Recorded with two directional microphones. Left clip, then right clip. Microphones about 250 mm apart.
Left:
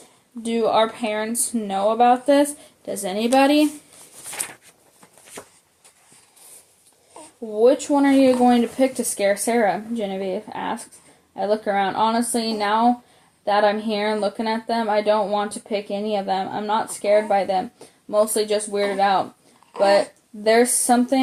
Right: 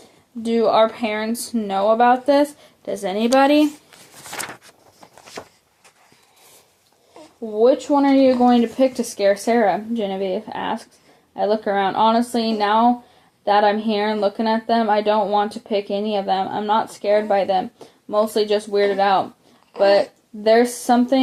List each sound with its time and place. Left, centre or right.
0.4 s speech: right
4.2 s a sound: right
7.5 s speech: right